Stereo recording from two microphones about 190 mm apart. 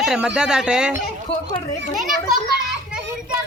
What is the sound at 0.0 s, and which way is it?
Speech, 5° right (ahead or behind).